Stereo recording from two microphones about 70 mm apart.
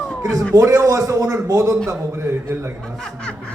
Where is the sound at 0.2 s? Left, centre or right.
Right.